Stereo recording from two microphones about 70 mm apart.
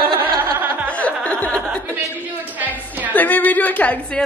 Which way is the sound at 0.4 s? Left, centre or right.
Right.